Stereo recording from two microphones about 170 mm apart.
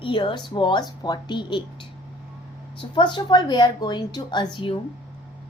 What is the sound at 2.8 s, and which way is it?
A woman's voice, 30° left (ahead or behind).